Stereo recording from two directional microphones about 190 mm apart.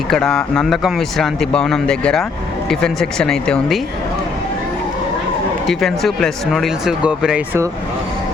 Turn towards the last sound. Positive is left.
turn(degrees=-10)  # may be behind; listen again after turning